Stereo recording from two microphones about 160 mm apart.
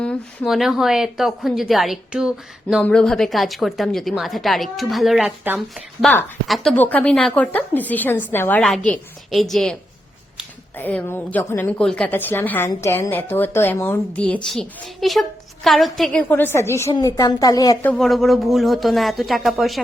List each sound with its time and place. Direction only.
0.0 s a woman's voice: centre (ahead or behind)
2.8 s a woman's voice: 5° left (ahead or behind)
10.8 s a woman's voice: 10° left (ahead or behind)
17.8 s a woman's voice: centre (ahead or behind)